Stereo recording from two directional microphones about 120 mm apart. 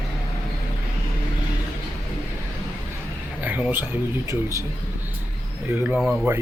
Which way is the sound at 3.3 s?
15° right (ahead or behind).